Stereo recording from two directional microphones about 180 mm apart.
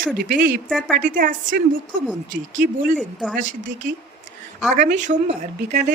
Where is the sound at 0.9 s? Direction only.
45° right (ahead or behind).